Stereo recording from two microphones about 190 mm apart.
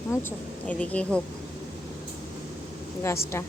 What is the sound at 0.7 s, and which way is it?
Speech, 5° left (ahead or behind).